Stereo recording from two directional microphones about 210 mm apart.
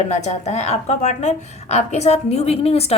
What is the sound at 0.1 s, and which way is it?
Speech, 35° left (ahead or behind).